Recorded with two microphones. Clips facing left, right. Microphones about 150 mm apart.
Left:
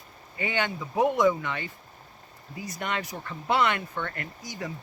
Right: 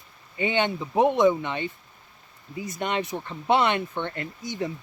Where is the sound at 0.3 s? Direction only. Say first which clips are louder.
Right 5 dB; 25° right (ahead or behind).